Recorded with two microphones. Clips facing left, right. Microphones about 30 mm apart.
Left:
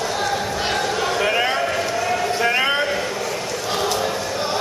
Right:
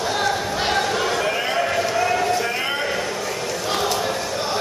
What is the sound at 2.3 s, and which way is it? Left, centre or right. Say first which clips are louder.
Clip-clop: left 4 dB; left.